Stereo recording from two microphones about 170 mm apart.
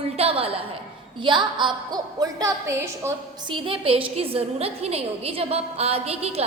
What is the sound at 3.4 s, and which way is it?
A woman's voice, 30° right (ahead or behind).